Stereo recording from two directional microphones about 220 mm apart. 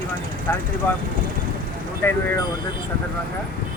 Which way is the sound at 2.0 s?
10° left (ahead or behind).